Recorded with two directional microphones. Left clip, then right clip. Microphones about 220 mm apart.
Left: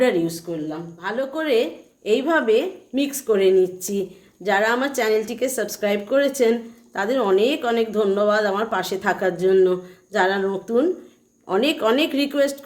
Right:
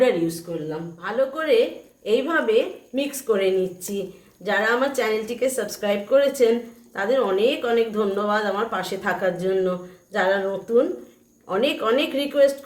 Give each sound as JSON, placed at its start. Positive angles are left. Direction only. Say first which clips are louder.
{"t": 1.0, "sound": "speech", "louder": "right 1 dB", "side_deg": 40}